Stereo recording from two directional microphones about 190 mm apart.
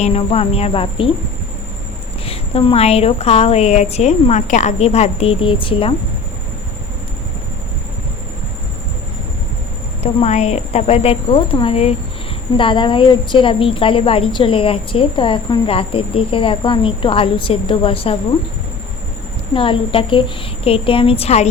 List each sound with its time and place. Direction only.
0.0 s a woman's voice: 30° left (ahead or behind)
2.2 s a woman's voice: 30° left (ahead or behind)
10.0 s a woman's voice: 35° left (ahead or behind)
19.5 s a woman's voice: 25° left (ahead or behind)